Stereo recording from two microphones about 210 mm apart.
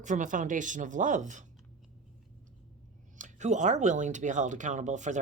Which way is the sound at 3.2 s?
35° right (ahead or behind).